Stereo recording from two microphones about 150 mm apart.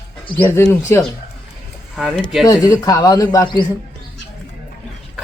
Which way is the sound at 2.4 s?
25° left (ahead or behind).